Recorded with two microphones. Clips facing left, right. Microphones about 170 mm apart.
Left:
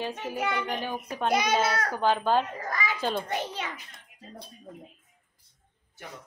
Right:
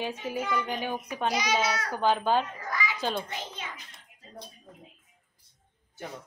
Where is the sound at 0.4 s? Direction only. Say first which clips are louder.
Left 1 dB; 75° left (ahead or behind).